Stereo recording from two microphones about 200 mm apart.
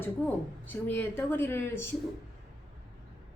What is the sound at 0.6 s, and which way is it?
A woman's voice, 10° left (ahead or behind).